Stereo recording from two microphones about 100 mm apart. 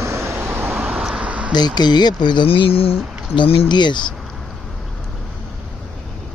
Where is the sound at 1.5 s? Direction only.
45° left (ahead or behind).